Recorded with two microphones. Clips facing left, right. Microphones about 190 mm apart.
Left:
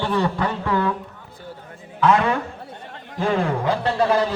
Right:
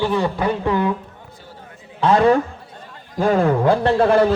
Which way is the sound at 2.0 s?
35° right (ahead or behind).